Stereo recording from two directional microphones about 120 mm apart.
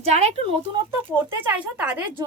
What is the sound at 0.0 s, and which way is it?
Speech, 65° right (ahead or behind).